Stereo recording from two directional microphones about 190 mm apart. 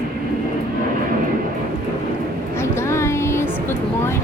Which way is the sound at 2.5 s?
15° left (ahead or behind).